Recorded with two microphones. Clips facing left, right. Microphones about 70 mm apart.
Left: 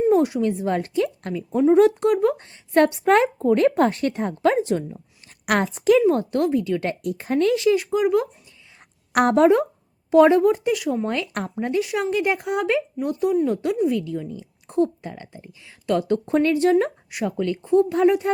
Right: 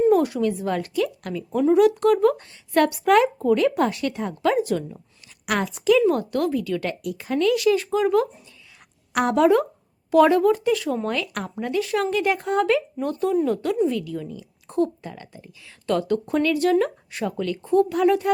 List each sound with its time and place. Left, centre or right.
0.1 s speech: left
1.3 s speech: centre
1.7 s speech: left
5.5 s a woman's voice: left
6.0 s speech: left
9.1 s speech: left
10.1 s speech: left